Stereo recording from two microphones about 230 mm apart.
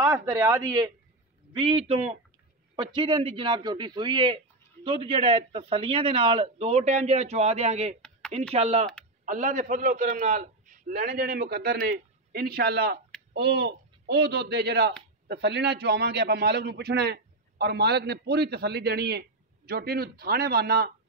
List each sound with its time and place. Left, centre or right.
0.0 s a man's voice: centre; by 20.9 s right